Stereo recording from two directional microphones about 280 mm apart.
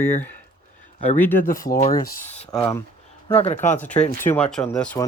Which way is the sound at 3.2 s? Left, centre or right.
Left.